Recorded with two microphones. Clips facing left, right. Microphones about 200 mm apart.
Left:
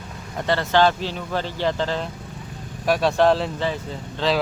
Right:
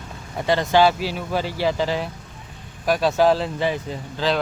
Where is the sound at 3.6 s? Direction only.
15° right (ahead or behind).